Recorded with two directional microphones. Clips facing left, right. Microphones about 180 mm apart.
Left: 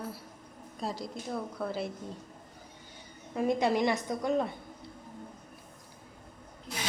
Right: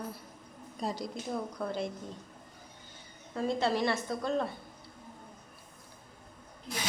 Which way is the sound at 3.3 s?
15° left (ahead or behind).